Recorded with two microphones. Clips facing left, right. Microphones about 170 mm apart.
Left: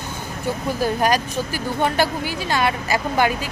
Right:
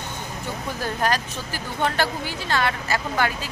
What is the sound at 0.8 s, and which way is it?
Speech, 10° left (ahead or behind).